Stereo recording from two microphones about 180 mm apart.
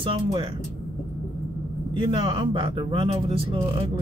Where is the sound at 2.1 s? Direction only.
25° right (ahead or behind).